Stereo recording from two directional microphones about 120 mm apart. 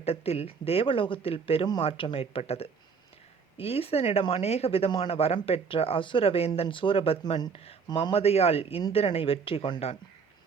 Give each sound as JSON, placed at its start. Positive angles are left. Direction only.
{"t": 0.0, "sound": "speech", "side_deg": 55}